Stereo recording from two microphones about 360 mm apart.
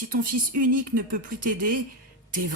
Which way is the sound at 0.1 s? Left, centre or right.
Right.